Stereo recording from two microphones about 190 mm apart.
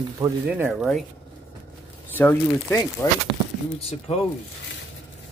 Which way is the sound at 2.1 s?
10° left (ahead or behind).